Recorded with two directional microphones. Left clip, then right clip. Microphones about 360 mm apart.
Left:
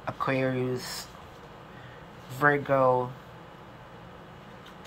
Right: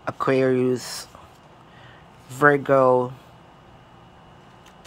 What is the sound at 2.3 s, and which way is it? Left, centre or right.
Speech, centre.